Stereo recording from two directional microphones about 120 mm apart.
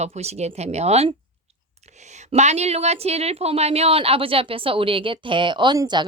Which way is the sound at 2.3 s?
65° right (ahead or behind).